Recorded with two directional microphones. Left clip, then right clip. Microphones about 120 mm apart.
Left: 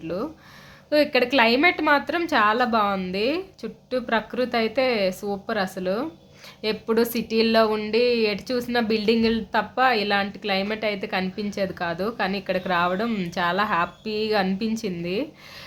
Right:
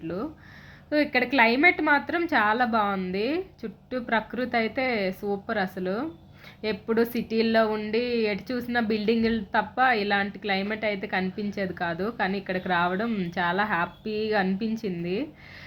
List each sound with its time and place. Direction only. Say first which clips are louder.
0.9 s speech: left 4 dB; 25° left (ahead or behind)